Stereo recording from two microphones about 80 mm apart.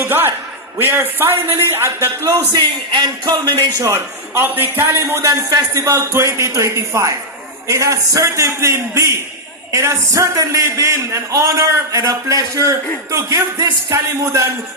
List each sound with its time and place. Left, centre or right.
0.0 s a sound: right
0.8 s a man's voice: right
2.5 s speech: right
3.8 s a man's voice: right
5.2 s a man's voice: right